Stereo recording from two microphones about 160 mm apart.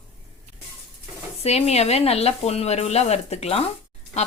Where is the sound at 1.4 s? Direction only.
40° left (ahead or behind).